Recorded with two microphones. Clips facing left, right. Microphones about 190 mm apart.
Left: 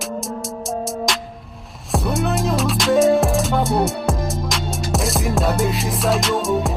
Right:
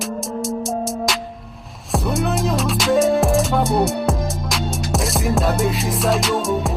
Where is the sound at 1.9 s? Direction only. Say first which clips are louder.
Even; centre (ahead or behind).